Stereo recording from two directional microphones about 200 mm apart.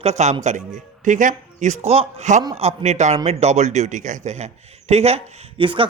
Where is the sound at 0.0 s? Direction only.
35° right (ahead or behind).